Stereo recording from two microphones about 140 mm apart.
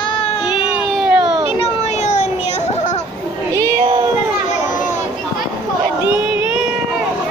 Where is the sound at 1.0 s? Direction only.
5° right (ahead or behind).